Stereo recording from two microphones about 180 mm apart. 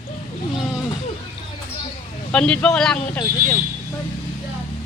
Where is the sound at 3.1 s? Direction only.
15° left (ahead or behind).